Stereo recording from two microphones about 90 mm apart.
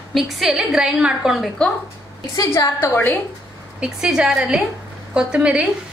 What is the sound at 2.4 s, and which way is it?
Speech, 35° left (ahead or behind).